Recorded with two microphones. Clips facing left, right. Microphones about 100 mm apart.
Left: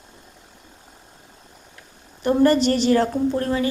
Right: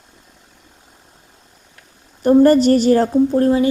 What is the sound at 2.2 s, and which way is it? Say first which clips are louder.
A woman's voice: right 6 dB; 45° right (ahead or behind).